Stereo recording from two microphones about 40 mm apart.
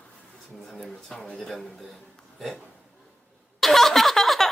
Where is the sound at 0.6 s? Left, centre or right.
Centre.